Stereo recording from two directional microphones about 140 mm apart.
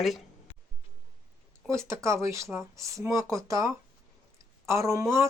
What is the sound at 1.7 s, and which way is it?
Speech, 20° right (ahead or behind).